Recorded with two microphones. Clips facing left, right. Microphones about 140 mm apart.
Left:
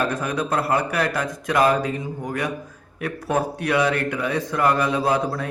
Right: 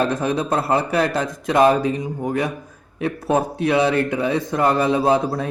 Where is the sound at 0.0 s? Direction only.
25° right (ahead or behind).